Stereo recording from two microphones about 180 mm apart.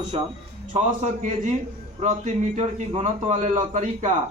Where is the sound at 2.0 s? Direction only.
40° right (ahead or behind).